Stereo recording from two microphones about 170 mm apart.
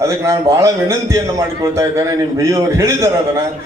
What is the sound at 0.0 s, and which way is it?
A man's voice, 15° right (ahead or behind).